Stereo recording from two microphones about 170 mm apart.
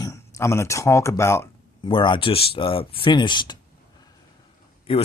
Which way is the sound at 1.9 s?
30° left (ahead or behind).